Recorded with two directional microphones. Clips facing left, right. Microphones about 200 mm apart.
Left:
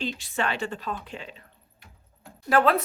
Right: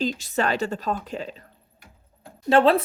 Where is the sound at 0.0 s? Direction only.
40° right (ahead or behind).